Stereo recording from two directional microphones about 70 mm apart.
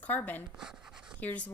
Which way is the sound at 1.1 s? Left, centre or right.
Left.